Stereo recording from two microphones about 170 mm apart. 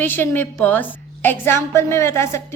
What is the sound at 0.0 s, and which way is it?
A woman's voice, 10° left (ahead or behind).